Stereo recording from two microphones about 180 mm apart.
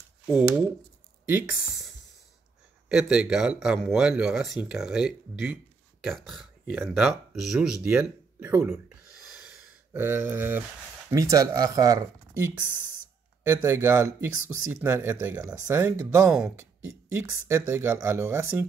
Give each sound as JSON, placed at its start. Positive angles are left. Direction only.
{"t": 1.2, "sound": "speech", "side_deg": -10}
{"t": 2.9, "sound": "speech", "side_deg": -5}
{"t": 9.5, "sound": "sigh", "side_deg": -10}
{"t": 11.1, "sound": "speech", "side_deg": -20}
{"t": 17.1, "sound": "speech", "side_deg": -15}